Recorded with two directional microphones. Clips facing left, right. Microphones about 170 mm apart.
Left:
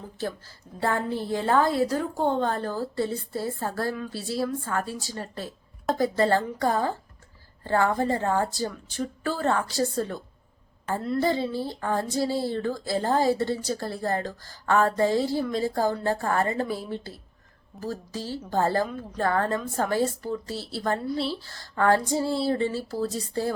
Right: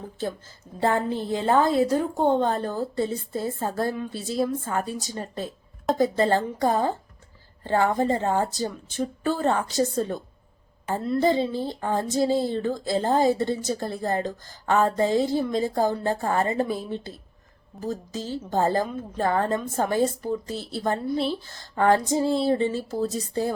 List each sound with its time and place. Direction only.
0.2 s speech: 20° right (ahead or behind)